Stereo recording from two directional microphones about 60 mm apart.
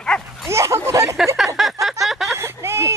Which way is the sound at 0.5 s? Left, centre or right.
Right.